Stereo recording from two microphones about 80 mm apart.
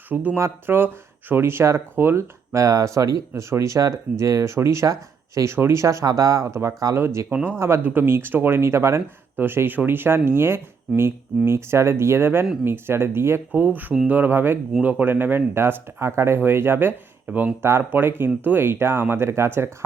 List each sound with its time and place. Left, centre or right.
0.1 s speech: centre
0.3 s speech: right
7.3 s speech: right